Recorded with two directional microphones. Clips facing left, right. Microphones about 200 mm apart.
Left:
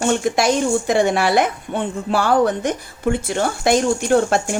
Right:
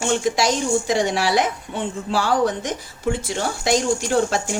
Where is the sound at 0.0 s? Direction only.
55° left (ahead or behind).